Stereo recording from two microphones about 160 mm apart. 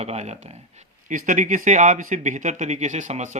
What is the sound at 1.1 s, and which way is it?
Speech, 55° right (ahead or behind).